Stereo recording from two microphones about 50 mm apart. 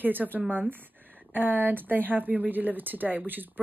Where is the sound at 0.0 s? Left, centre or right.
Right.